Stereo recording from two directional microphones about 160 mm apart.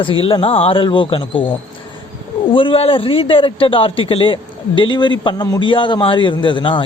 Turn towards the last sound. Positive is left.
turn(degrees=30)  # may be behind; listen again after turning